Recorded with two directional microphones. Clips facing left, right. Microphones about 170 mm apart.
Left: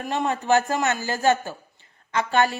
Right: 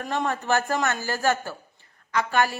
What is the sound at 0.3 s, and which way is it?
A woman's voice, 15° left (ahead or behind).